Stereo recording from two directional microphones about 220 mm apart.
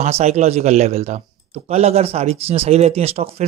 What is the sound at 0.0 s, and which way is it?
Speech, 30° right (ahead or behind).